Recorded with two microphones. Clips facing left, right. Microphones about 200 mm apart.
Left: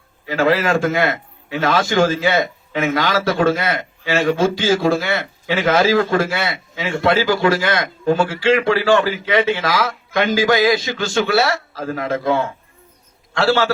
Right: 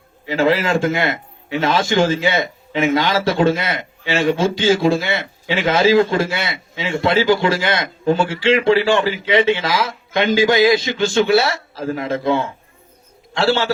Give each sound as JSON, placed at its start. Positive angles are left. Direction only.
{"t": 0.3, "sound": "a man's voice", "side_deg": -25}